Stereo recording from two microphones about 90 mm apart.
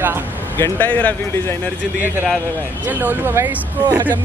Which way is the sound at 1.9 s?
20° right (ahead or behind).